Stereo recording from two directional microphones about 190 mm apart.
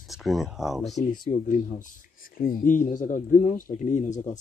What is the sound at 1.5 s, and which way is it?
Speech, 40° left (ahead or behind).